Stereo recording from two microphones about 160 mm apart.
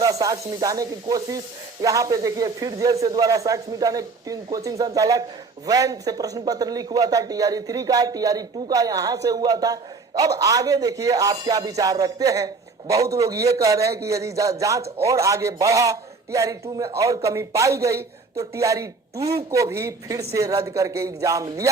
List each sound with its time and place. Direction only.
0.0 s a man's voice: 20° right (ahead or behind)